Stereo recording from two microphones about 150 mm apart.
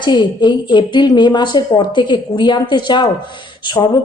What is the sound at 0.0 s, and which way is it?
A woman's voice, 30° left (ahead or behind).